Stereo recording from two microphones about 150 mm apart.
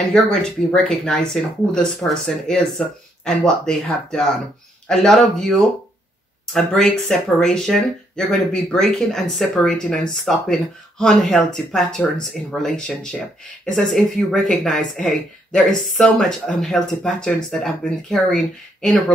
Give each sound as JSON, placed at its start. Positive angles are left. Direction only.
{"t": 0.1, "sound": "speech", "side_deg": 5}
{"t": 6.4, "sound": "speech", "side_deg": 5}